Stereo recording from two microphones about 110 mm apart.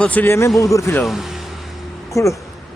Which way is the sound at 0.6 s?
30° left (ahead or behind).